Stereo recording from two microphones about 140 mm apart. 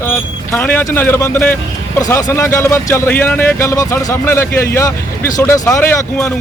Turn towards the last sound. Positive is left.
turn(degrees=20)  # may be behind; listen again after turning